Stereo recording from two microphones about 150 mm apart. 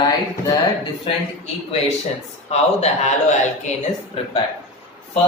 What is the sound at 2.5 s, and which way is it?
A man's voice, 50° left (ahead or behind).